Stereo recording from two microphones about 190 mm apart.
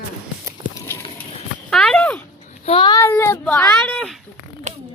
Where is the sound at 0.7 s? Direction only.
10° left (ahead or behind).